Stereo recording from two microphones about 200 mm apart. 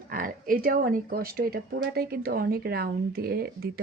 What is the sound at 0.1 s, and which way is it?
A woman's voice, 45° right (ahead or behind).